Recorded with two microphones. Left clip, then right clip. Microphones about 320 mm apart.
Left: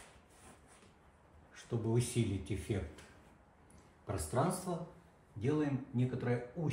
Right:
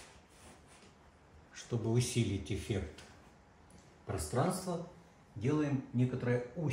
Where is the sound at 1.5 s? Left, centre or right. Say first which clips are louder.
Right 1 dB; centre.